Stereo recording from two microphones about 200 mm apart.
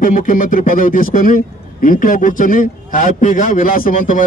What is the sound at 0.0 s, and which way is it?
A man's voice, 40° left (ahead or behind).